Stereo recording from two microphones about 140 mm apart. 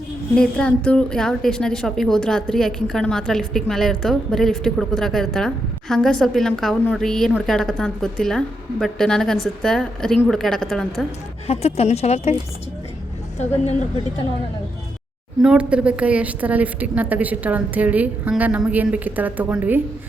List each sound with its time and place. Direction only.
0.3 s a woman's voice: 5° left (ahead or behind)
11.4 s speech: 50° left (ahead or behind)
15.4 s a woman's voice: 5° right (ahead or behind)